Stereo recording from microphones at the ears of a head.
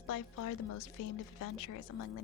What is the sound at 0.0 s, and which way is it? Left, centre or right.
A woman's voice, left.